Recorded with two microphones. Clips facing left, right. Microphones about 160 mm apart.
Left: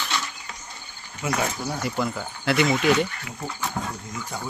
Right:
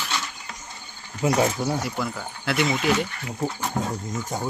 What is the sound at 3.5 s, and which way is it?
Speech, 45° right (ahead or behind).